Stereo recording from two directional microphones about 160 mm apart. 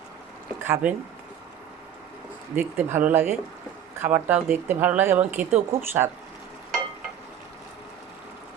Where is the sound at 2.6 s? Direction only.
15° right (ahead or behind).